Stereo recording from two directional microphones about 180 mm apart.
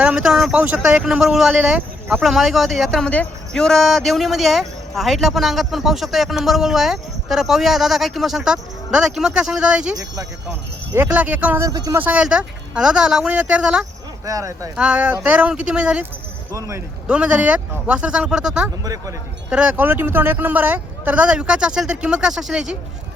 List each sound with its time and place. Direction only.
0.0 s a man's voice: 5° right (ahead or behind)
10.9 s speech: 10° right (ahead or behind)
14.3 s speech: 20° right (ahead or behind)
14.8 s a man's voice: 5° right (ahead or behind)
16.5 s a man's voice: 15° right (ahead or behind)